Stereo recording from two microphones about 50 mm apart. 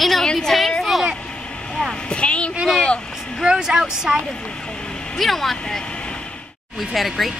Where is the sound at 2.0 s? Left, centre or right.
Left.